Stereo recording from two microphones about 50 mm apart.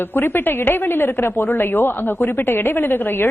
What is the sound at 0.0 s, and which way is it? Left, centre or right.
Speech, left.